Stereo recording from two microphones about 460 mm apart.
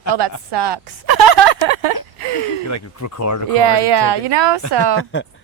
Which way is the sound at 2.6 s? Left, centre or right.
Left.